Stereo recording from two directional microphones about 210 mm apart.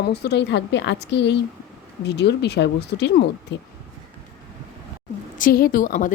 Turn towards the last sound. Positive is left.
turn(degrees=40)  # may be behind; listen again after turning